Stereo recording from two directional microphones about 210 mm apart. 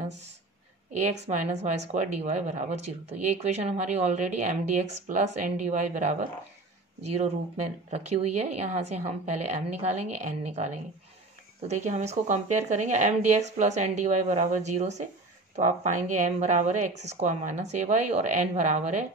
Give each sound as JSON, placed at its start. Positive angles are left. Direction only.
{"t": 0.9, "sound": "a woman's voice", "side_deg": -30}